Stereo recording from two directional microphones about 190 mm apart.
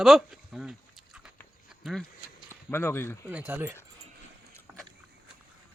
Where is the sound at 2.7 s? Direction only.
10° left (ahead or behind).